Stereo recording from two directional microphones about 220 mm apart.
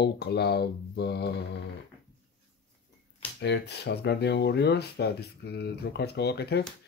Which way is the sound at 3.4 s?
50° left (ahead or behind).